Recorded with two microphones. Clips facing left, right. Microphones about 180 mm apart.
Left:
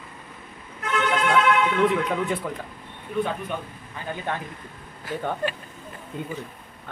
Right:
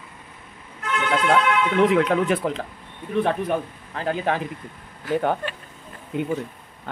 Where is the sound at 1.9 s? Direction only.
90° right.